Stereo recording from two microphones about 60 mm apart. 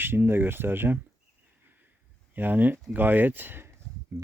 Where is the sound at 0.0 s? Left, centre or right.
Right.